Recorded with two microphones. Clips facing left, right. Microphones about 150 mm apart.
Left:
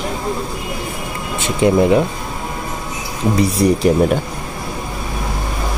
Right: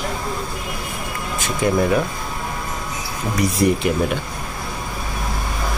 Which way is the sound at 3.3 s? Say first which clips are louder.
Left 3 dB; 30° left (ahead or behind).